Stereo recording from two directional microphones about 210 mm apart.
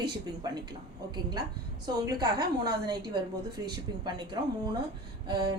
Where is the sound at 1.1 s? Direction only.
20° right (ahead or behind).